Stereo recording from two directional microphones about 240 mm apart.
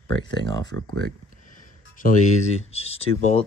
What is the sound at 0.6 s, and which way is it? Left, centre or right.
Speech, right.